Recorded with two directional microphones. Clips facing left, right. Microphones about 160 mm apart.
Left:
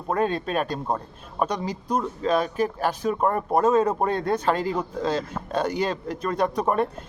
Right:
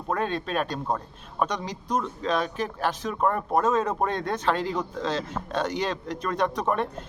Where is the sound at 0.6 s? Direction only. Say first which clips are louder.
Left 1 dB; 10° left (ahead or behind).